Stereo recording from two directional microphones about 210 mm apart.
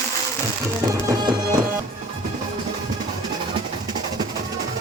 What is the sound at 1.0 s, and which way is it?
Music, 20° right (ahead or behind).